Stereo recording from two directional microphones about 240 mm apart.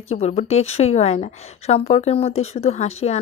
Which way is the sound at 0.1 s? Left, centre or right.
Left.